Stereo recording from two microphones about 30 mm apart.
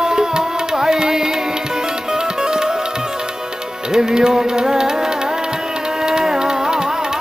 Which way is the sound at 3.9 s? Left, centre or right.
Right.